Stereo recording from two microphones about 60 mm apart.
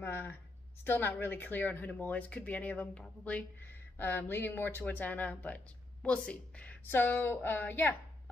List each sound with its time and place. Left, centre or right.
0.0 s a sound: left
0.8 s speech: left
3.6 s a woman's voice: left
6.9 s speech: left